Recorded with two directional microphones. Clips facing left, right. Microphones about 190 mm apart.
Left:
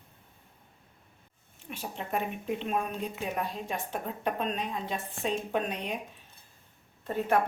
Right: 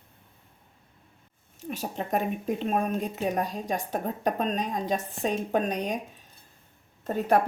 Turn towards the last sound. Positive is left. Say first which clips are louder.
# right 4 dB
turn(degrees=-45)  # may be behind; listen again after turning